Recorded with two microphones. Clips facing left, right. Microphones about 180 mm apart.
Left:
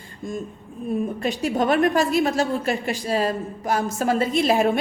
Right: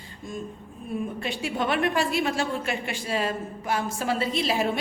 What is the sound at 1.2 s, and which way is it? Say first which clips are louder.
A woman's voice: left 6 dB; 40° left (ahead or behind).